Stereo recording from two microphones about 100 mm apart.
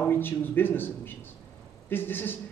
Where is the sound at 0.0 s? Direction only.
20° left (ahead or behind).